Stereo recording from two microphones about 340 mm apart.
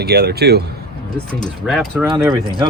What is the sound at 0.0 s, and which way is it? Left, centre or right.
Speech, right.